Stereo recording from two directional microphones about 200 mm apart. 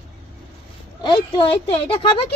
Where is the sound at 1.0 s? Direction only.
20° left (ahead or behind).